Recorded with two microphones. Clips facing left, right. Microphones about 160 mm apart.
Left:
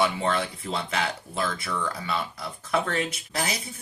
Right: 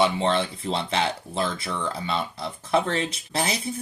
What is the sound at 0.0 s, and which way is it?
Speech, 25° right (ahead or behind).